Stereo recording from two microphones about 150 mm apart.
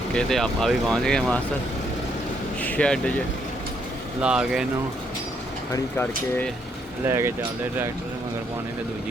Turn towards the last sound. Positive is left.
turn(degrees=-15)  # may be behind; listen again after turning